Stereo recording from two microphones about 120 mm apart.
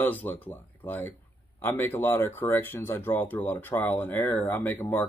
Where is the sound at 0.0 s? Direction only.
15° left (ahead or behind).